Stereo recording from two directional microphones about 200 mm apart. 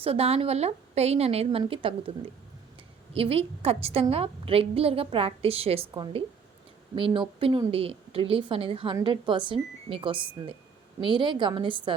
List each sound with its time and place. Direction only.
0.0 s a woman's voice: 30° right (ahead or behind)